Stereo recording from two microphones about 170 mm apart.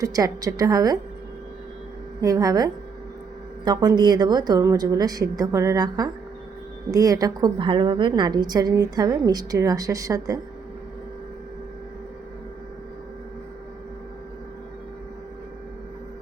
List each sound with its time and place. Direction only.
0.0 s a woman's voice: 20° right (ahead or behind)
2.2 s a woman's voice: 20° right (ahead or behind)